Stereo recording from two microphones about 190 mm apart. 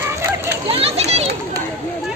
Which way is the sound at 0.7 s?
30° right (ahead or behind).